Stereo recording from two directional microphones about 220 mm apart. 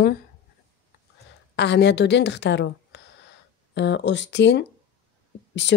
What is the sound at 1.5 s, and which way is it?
A woman's voice, 50° left (ahead or behind).